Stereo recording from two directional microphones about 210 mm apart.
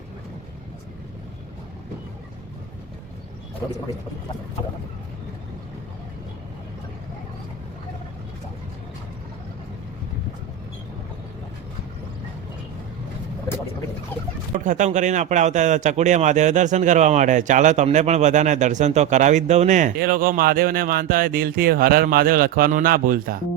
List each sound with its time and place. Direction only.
14.6 s speech: 35° right (ahead or behind)